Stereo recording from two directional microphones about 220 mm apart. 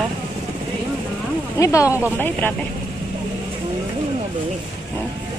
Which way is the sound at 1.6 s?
15° left (ahead or behind).